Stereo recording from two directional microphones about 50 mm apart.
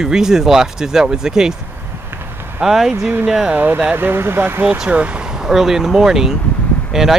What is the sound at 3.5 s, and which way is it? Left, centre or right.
Speech, right.